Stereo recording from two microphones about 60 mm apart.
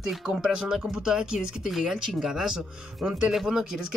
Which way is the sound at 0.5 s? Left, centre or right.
Centre.